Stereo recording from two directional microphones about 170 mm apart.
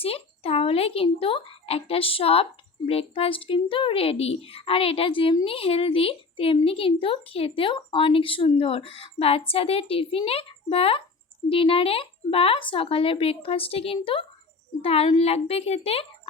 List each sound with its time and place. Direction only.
0.0 s speech: 35° left (ahead or behind)